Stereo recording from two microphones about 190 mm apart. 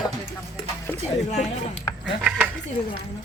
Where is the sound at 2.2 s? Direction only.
10° right (ahead or behind).